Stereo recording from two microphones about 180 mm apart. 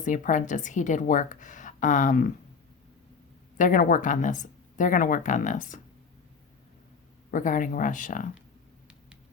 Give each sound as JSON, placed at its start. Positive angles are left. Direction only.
{"t": 0.0, "sound": "a woman's voice", "side_deg": 45}
{"t": 3.6, "sound": "a woman's voice", "side_deg": 50}
{"t": 7.3, "sound": "a woman's voice", "side_deg": 45}